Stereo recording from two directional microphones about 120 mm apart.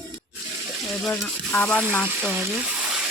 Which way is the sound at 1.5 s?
10° left (ahead or behind).